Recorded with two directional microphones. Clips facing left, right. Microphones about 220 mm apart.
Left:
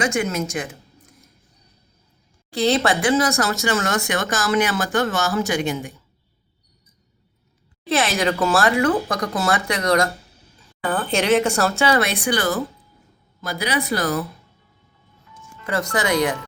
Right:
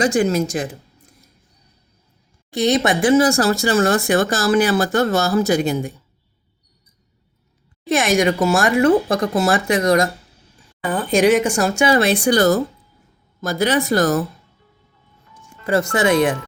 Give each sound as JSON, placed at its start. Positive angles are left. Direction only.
{"t": 0.0, "sound": "speech", "side_deg": -35}
{"t": 2.5, "sound": "speech", "side_deg": -15}
{"t": 7.9, "sound": "speech", "side_deg": -15}
{"t": 8.8, "sound": "speech", "side_deg": -25}
{"t": 10.8, "sound": "speech", "side_deg": -10}
{"t": 11.9, "sound": "speech", "side_deg": -25}
{"t": 12.2, "sound": "speech", "side_deg": -40}
{"t": 15.6, "sound": "speech", "side_deg": -25}